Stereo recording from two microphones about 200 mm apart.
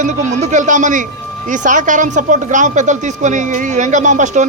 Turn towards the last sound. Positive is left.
turn(degrees=-35)  # may be behind; listen again after turning